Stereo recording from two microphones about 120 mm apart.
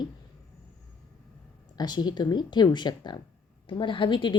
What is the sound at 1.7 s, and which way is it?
A woman's voice, 35° left (ahead or behind).